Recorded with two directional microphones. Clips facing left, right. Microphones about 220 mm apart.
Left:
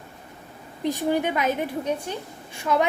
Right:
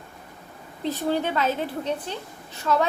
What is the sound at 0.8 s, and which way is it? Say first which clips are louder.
A woman's voice: left 2 dB; 15° left (ahead or behind).